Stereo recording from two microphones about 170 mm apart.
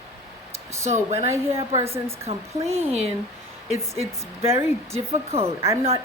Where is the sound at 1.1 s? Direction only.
40° right (ahead or behind).